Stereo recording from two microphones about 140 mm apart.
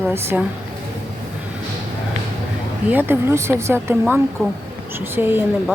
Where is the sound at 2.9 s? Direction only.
15° right (ahead or behind).